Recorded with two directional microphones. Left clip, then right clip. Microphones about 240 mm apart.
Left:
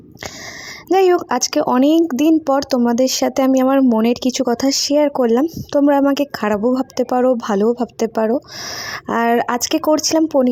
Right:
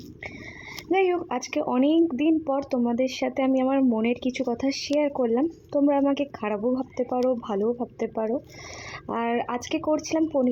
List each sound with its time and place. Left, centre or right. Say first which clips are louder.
0.9 s speech: left 10 dB; left